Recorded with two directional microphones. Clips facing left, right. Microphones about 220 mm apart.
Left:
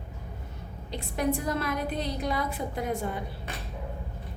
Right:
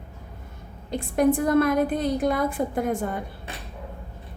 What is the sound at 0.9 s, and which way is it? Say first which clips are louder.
Speech: right 8 dB; 50° right (ahead or behind).